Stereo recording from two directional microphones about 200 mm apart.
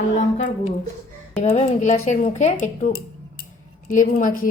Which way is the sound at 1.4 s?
35° left (ahead or behind).